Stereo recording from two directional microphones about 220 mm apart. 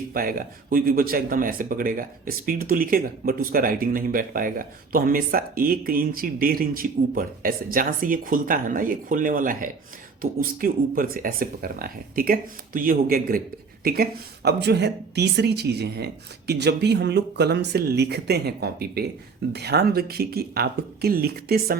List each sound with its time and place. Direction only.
0.1 s speech: 40° right (ahead or behind)